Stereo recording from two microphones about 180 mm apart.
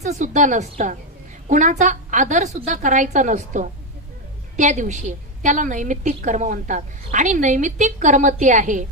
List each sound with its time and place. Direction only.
0.0 s a woman's voice: 40° right (ahead or behind)